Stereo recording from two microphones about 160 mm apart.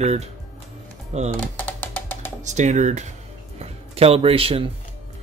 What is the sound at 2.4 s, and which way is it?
Speech, 50° right (ahead or behind).